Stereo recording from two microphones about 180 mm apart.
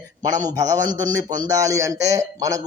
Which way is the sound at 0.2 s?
20° right (ahead or behind).